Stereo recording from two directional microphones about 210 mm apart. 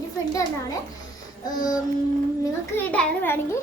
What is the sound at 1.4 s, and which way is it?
A child's voice, 15° left (ahead or behind).